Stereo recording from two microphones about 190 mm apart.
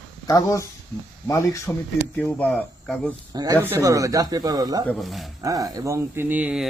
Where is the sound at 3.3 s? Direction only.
20° right (ahead or behind).